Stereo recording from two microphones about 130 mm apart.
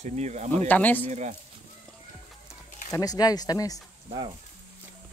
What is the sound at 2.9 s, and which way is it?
Speech, 30° left (ahead or behind).